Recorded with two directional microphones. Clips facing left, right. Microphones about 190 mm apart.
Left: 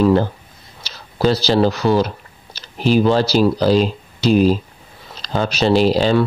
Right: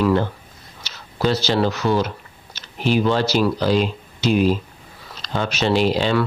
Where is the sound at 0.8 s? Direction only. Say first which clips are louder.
Left 4 dB; 35° left (ahead or behind).